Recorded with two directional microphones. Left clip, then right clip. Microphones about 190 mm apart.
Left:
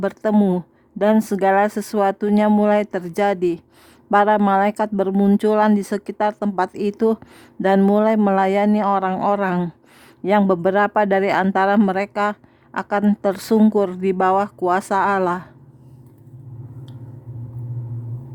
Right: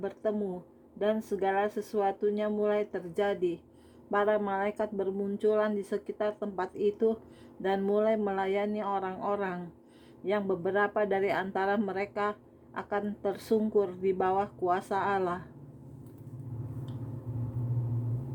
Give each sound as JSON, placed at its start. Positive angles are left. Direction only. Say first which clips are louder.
{"t": 0.0, "sound": "speech", "louder": "left 13 dB", "side_deg": 40}